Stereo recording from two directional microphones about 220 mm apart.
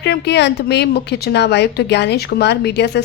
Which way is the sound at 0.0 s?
50° left (ahead or behind).